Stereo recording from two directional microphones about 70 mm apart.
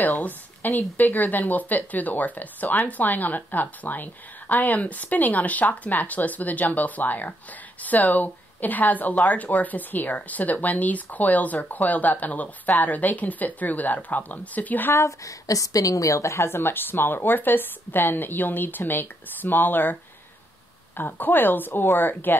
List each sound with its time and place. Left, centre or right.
0.0 s speech: left
15.0 s a woman's voice: left